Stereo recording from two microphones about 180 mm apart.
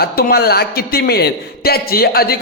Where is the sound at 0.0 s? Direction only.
60° left (ahead or behind).